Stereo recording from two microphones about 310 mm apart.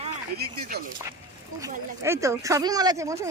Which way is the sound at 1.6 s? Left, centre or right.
Centre.